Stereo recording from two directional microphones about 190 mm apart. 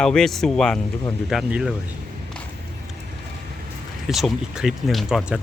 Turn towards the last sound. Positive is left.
turn(degrees=-5)  # may be behind; listen again after turning